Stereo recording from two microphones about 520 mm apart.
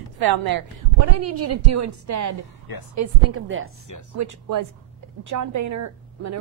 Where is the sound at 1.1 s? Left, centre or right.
Right.